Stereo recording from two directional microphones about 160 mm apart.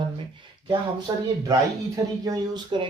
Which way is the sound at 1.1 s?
25° right (ahead or behind).